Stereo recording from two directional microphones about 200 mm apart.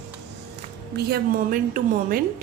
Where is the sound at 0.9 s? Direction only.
50° right (ahead or behind).